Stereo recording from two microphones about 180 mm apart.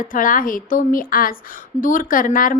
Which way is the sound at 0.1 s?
50° left (ahead or behind).